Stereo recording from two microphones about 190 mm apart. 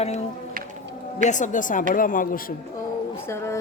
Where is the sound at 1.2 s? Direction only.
40° left (ahead or behind).